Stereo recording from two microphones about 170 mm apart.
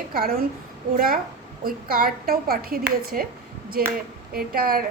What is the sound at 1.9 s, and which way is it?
A woman's voice, 60° right (ahead or behind).